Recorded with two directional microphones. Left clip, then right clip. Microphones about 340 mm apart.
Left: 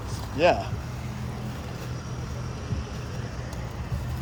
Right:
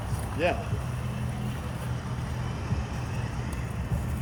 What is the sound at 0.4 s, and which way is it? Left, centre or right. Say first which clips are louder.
Speech: left 7 dB; centre.